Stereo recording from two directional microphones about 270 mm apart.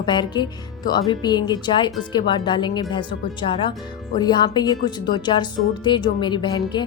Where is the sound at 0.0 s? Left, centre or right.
Centre.